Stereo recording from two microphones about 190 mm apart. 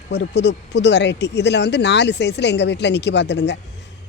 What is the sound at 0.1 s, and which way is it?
Speech, 65° left (ahead or behind).